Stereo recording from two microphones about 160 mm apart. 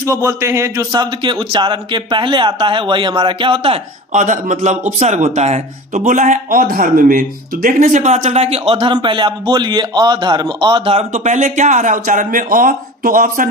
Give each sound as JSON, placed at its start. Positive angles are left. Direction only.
{"t": 0.1, "sound": "a man's voice", "side_deg": -20}
{"t": 4.1, "sound": "a man's voice", "side_deg": -50}
{"t": 11.1, "sound": "a man's voice", "side_deg": -50}